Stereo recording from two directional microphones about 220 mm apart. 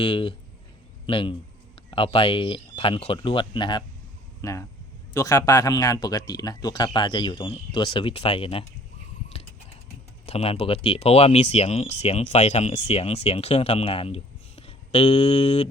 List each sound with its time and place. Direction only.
0.0 s speech: 25° left (ahead or behind)
10.2 s speech: 25° left (ahead or behind)